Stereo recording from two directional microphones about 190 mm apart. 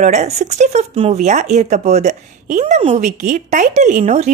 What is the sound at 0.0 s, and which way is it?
Speech, 35° right (ahead or behind).